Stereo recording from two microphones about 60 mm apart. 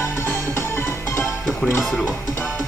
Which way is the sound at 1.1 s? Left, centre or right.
Left.